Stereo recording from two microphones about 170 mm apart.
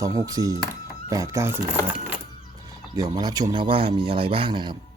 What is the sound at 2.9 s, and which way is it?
Speech, 20° right (ahead or behind).